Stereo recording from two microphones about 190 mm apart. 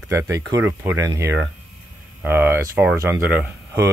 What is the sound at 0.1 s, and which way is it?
Speech, 15° right (ahead or behind).